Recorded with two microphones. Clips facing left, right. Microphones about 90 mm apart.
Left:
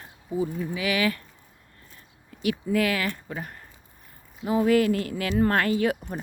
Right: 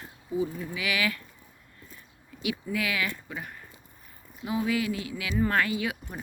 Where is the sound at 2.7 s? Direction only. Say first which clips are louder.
Left 6 dB; 45° left (ahead or behind).